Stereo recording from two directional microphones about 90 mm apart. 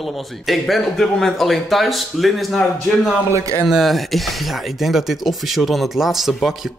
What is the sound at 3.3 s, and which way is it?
Speech, 35° right (ahead or behind).